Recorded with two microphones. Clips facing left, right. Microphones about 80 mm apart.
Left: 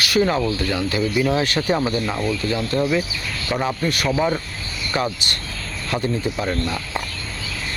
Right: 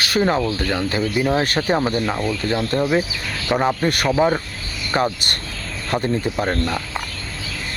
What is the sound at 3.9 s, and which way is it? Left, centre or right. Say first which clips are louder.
Speech: right 1 dB; right.